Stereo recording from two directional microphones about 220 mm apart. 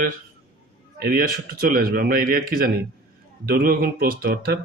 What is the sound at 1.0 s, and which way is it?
Speech, 40° right (ahead or behind).